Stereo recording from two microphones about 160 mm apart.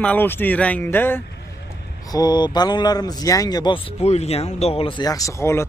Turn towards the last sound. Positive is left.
turn(degrees=15)  # may be behind; listen again after turning